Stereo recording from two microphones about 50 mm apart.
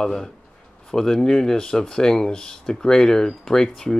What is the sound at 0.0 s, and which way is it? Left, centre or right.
Speech, centre.